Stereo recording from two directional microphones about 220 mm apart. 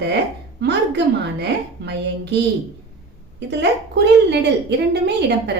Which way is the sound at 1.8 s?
50° right (ahead or behind).